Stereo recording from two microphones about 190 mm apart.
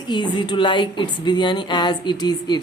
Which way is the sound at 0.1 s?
25° left (ahead or behind).